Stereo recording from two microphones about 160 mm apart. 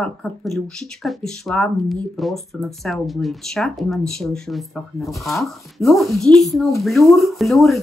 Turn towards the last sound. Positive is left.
turn(degrees=0)  # may be behind; listen again after turning